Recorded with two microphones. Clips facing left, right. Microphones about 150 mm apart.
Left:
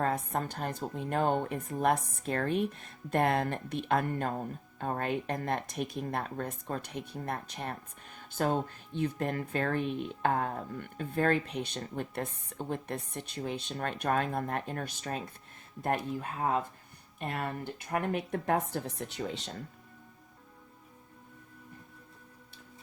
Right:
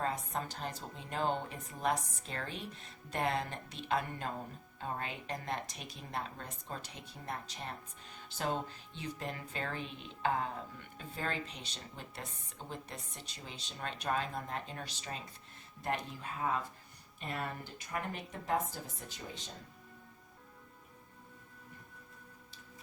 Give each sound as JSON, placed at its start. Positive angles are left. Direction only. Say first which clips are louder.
{"t": 0.0, "sound": "speech", "louder": "left 6 dB", "side_deg": 55}